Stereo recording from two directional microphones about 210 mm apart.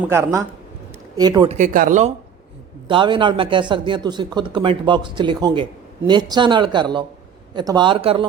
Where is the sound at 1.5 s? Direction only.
35° right (ahead or behind).